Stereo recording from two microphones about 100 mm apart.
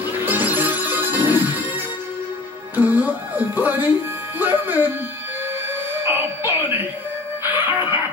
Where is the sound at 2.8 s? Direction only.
15° right (ahead or behind).